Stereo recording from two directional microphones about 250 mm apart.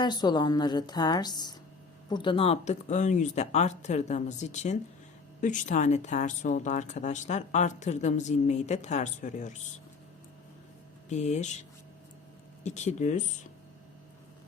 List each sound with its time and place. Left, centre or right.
0.0 s a woman's voice: centre
11.1 s speech: left
12.6 s speech: left